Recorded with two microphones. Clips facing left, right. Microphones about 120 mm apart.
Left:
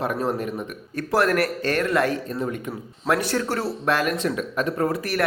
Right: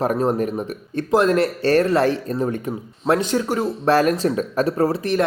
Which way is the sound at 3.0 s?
25° right (ahead or behind).